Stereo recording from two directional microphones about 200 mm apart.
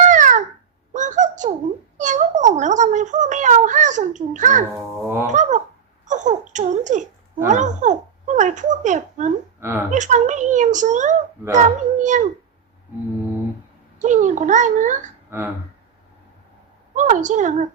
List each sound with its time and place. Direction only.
0.0 s babbling: 40° right (ahead or behind)
0.9 s a sound: 40° right (ahead or behind)
2.0 s speech: 40° right (ahead or behind)
9.6 s a woman's voice: 10° right (ahead or behind)
9.9 s speech: 40° right (ahead or behind)
14.0 s speech: 40° right (ahead or behind)
15.3 s speech: 10° right (ahead or behind)
16.9 s speech: 40° right (ahead or behind)